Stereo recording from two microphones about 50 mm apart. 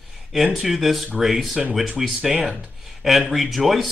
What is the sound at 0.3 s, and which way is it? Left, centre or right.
Speech, centre.